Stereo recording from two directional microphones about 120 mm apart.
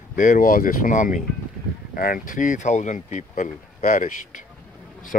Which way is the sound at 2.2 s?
90° left.